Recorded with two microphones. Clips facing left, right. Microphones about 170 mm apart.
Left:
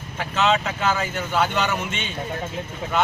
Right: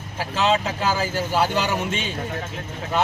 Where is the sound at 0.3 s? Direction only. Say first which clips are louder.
Even; 35° right (ahead or behind).